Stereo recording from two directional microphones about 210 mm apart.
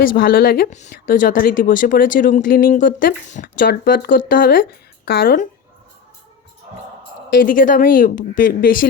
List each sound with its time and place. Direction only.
0.0 s a woman's voice: 45° left (ahead or behind)
7.4 s speech: 40° left (ahead or behind)